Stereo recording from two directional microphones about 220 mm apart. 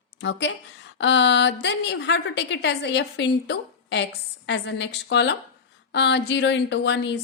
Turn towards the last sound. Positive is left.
turn(degrees=55)  # may be behind; listen again after turning